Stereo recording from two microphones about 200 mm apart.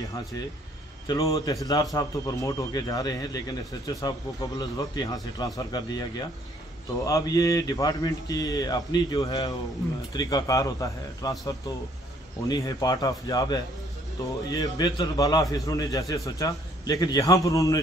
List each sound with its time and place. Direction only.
1.0 s a man's voice: 15° left (ahead or behind)